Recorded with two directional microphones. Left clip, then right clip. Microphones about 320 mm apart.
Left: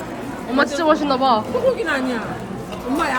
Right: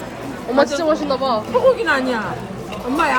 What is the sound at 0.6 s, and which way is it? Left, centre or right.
Speech, centre.